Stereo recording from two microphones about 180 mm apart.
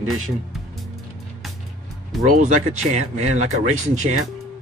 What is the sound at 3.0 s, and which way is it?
Speech, 40° right (ahead or behind).